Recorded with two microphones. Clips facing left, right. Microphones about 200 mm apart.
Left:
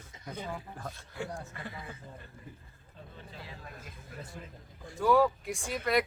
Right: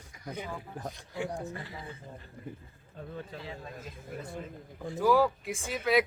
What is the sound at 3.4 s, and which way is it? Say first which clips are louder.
Speech: right 5 dB; 25° right (ahead or behind).